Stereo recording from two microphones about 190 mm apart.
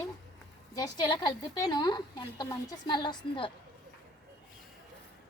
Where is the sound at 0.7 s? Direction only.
20° left (ahead or behind).